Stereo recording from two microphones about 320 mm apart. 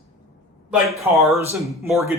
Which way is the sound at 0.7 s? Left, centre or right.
Centre.